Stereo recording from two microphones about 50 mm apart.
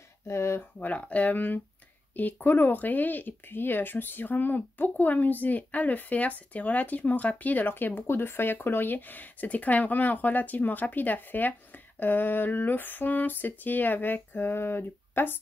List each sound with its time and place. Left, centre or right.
0.3 s speech: left
0.6 s speech: left